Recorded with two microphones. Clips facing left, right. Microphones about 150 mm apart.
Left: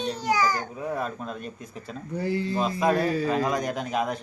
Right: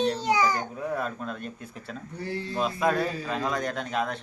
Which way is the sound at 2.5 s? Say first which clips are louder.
Even; 5° left (ahead or behind).